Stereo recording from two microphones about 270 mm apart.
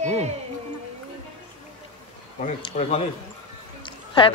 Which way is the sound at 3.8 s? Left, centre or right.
Centre.